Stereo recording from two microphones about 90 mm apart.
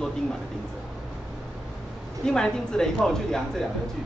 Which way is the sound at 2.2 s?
10° left (ahead or behind).